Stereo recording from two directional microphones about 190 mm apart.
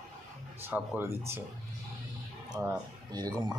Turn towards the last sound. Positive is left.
turn(degrees=-20)  # may be behind; listen again after turning